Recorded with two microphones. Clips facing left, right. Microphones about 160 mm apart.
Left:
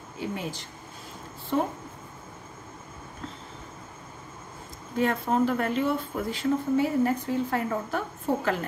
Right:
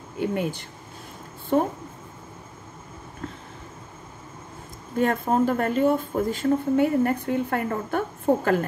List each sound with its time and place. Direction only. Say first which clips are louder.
0.2 s speech: right 7 dB; 55° right (ahead or behind)
4.9 s speech: right 3 dB; 50° right (ahead or behind)